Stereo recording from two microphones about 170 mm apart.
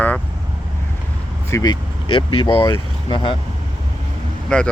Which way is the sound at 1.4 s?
20° left (ahead or behind).